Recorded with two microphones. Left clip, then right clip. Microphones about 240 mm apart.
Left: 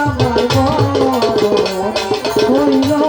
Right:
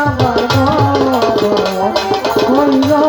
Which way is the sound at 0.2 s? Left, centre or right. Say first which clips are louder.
Right 1 dB; right.